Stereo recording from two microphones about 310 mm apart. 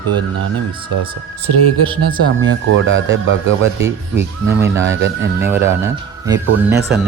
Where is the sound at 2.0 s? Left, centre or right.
Right.